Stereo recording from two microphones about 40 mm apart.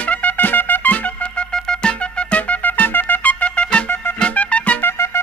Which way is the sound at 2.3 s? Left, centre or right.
Left.